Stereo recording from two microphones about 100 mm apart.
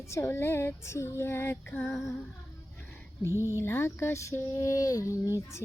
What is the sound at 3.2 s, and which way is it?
Speech, 25° right (ahead or behind).